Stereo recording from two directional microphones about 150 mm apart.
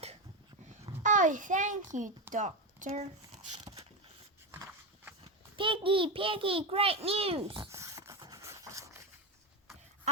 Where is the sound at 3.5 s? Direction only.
30° right (ahead or behind).